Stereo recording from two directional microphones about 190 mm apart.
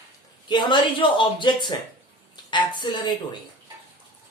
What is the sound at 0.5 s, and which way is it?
A woman's voice, 25° left (ahead or behind).